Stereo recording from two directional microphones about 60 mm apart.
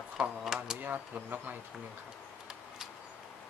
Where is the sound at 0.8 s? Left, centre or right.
Right.